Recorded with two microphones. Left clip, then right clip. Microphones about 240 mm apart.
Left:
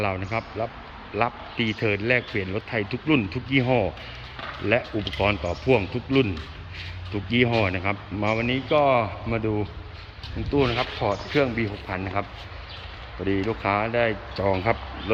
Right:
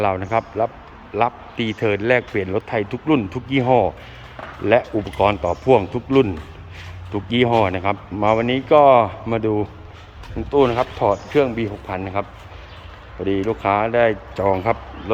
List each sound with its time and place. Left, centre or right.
0.0 s speech: centre
13.5 s speech: centre